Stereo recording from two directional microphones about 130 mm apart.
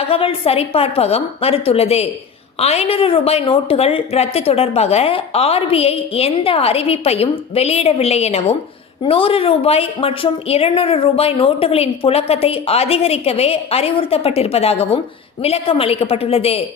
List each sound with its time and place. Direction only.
0.1 s a woman's voice: 45° left (ahead or behind)